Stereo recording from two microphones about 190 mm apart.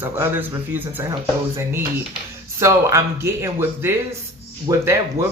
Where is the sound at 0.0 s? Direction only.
10° right (ahead or behind).